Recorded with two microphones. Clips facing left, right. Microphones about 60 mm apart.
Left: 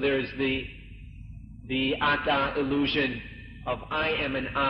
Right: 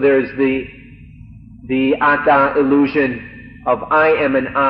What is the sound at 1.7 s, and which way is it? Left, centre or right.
Speech, right.